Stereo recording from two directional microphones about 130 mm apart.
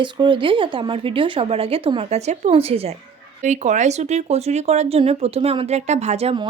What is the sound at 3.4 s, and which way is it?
Speech, 65° right (ahead or behind).